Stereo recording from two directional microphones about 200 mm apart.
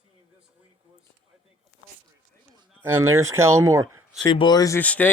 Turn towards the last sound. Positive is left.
turn(degrees=10)  # may be behind; listen again after turning